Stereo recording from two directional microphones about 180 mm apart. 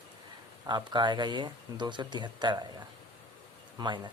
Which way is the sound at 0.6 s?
25° right (ahead or behind).